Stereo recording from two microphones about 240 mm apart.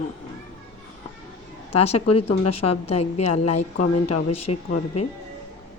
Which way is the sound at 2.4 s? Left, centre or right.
Left.